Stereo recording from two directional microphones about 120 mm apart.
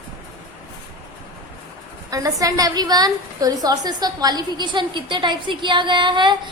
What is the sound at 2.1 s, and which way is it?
A woman's voice, 30° right (ahead or behind).